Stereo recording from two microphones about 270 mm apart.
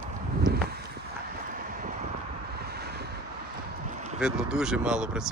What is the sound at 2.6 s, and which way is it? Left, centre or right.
Wind noise, right.